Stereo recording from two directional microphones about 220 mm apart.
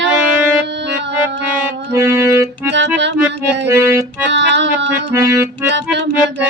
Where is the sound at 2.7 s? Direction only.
55° right (ahead or behind).